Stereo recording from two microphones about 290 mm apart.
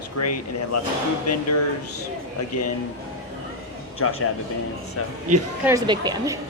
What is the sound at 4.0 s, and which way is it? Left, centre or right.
Speech, left.